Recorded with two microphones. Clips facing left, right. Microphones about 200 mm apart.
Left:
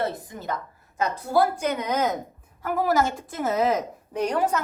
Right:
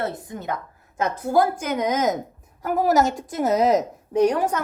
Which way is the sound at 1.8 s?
45° right (ahead or behind).